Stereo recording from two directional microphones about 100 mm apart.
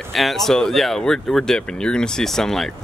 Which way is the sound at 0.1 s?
Centre (ahead or behind).